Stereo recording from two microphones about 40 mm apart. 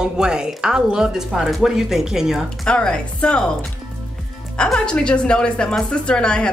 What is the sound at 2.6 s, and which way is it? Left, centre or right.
Speech, left.